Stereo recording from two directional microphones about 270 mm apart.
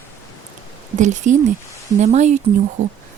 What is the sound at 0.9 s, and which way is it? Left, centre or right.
Speech, right.